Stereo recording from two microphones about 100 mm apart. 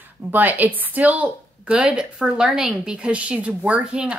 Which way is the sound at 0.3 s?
15° right (ahead or behind).